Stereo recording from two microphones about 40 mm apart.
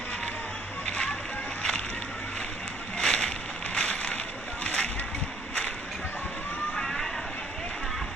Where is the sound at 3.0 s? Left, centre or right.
Centre.